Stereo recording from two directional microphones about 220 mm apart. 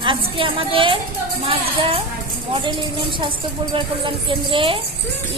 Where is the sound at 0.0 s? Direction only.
25° right (ahead or behind).